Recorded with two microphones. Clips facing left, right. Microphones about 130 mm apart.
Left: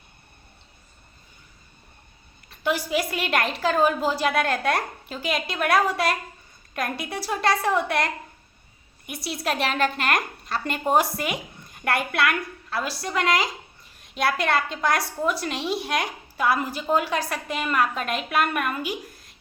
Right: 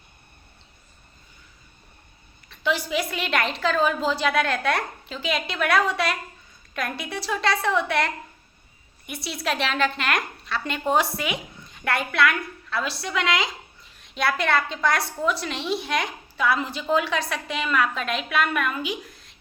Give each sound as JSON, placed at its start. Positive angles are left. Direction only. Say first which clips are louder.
{"t": 2.5, "sound": "a woman's voice", "louder": "left 1 dB", "side_deg": 50}
{"t": 6.7, "sound": "a woman's voice", "louder": "left 1 dB", "side_deg": 50}
{"t": 9.2, "sound": "a woman's voice", "louder": "left 1 dB", "side_deg": 50}